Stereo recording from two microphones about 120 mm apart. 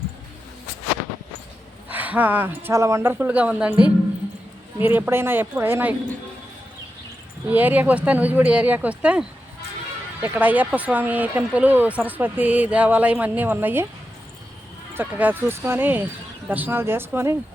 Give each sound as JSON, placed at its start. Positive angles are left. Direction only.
{"t": 1.9, "sound": "speech", "side_deg": -15}
{"t": 7.4, "sound": "speech", "side_deg": -15}
{"t": 14.9, "sound": "speech", "side_deg": -15}